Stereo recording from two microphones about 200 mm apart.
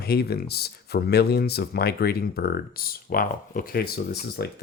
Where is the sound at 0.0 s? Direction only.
50° left (ahead or behind).